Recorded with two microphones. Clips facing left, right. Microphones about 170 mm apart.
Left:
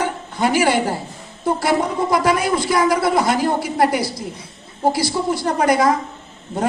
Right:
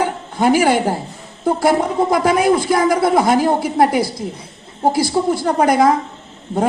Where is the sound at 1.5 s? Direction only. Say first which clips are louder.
Right 3 dB; 50° right (ahead or behind).